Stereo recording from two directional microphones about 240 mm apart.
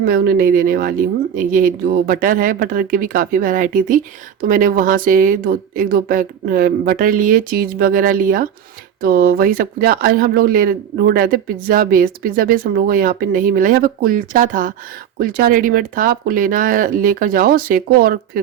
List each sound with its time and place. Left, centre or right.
0.0 s speech: right